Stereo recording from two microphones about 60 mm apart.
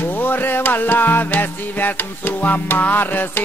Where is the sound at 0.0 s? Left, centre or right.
Left.